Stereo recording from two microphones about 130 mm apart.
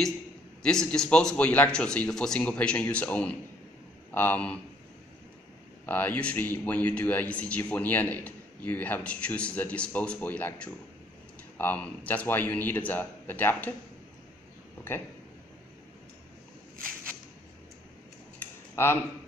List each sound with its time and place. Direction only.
0.6 s speech: 5° left (ahead or behind)
5.9 s speech: 15° left (ahead or behind)
18.4 s a sound: 15° left (ahead or behind)